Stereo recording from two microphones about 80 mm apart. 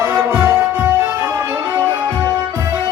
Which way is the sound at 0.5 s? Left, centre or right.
Right.